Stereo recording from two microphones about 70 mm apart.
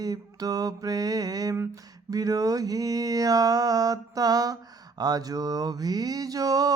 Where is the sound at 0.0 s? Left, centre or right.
Right.